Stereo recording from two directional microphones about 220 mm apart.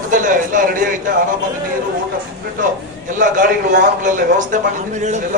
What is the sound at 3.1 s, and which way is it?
A man's voice, 35° right (ahead or behind).